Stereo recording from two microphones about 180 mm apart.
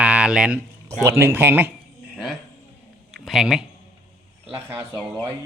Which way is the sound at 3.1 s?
Centre (ahead or behind).